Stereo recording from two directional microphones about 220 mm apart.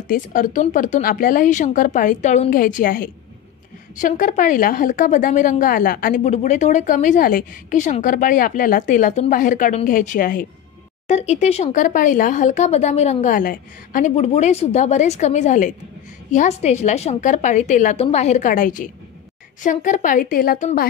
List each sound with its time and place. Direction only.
0.1 s a woman's voice: 40° left (ahead or behind)